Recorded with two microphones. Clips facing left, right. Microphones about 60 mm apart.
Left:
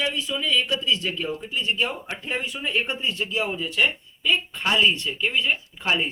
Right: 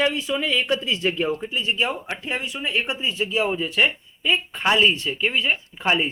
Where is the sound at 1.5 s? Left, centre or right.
Centre.